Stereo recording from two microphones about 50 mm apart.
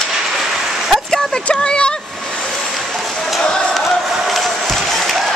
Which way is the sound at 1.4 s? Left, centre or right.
Left.